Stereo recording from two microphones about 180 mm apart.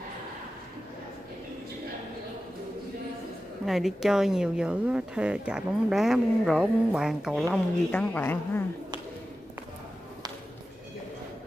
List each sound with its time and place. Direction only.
3.6 s speech: centre (ahead or behind)
7.4 s speech: 5° left (ahead or behind)